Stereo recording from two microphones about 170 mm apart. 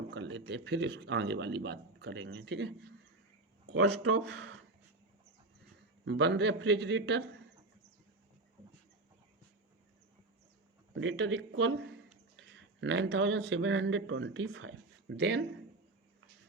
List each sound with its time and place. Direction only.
0.1 s a man's voice: 90° right
3.8 s a man's voice: 90° right
6.1 s a man's voice: 90° right
10.9 s a man's voice: 90° right